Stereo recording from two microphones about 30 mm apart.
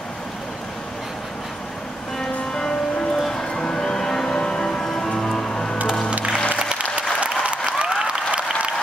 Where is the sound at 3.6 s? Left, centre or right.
Left.